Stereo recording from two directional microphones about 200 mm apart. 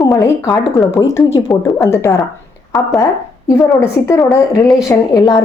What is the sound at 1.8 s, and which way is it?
Speech, 15° left (ahead or behind).